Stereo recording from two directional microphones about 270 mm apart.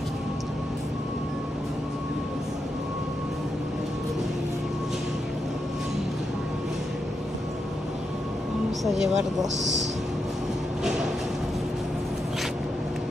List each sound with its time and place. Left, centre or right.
8.8 s speech: centre
9.6 s a man's voice: right